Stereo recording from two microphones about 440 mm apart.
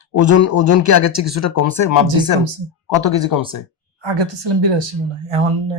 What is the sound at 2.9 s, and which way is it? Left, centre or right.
Speech, centre.